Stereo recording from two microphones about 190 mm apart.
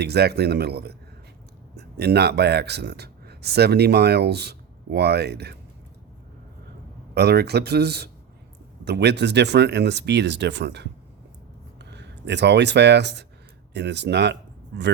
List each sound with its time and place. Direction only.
0.0 s speech: 60° right (ahead or behind)
7.1 s speech: 60° right (ahead or behind)